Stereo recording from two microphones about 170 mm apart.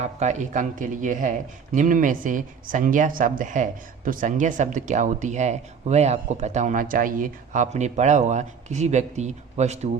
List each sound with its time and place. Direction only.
0.0 s speech: 40° right (ahead or behind)